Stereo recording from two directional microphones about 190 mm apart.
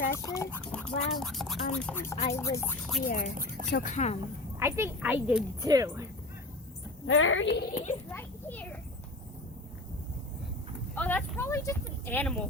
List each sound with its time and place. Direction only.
0.1 s speech: 15° left (ahead or behind)
0.6 s a sound: 5° left (ahead or behind)
1.1 s speech: centre (ahead or behind)
3.1 s speech: 45° left (ahead or behind)
3.3 s speech: 45° right (ahead or behind)
3.7 s a woman's voice: 55° left (ahead or behind)
3.9 s a child's voice: 35° left (ahead or behind)
4.6 s speech: 10° right (ahead or behind)
7.1 s speech: 90° left
7.7 s a child's voice: 35° left (ahead or behind)
8.1 s a sound: 10° left (ahead or behind)
10.9 s a sound: 10° left (ahead or behind)